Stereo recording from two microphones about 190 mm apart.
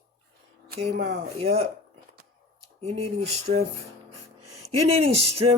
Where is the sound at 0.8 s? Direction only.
35° right (ahead or behind).